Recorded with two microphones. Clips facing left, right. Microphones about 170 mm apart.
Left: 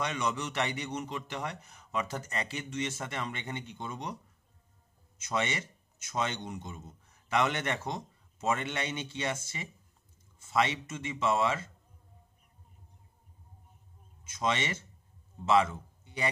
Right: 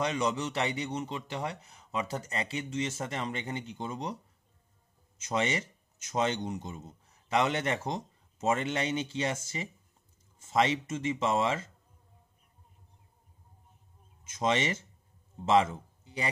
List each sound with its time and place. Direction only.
0.0 s a man's voice: 35° right (ahead or behind)
5.4 s a man's voice: 35° right (ahead or behind)
14.4 s a man's voice: 40° right (ahead or behind)